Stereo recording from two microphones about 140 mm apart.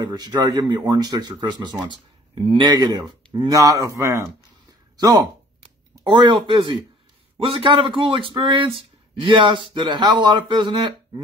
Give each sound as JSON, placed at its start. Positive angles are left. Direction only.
{"t": 0.0, "sound": "speech", "side_deg": -30}
{"t": 5.6, "sound": "a sound", "side_deg": -35}
{"t": 7.4, "sound": "speech", "side_deg": -40}